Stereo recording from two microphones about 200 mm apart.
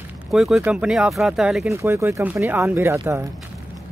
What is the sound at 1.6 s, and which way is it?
Speech, 15° right (ahead or behind).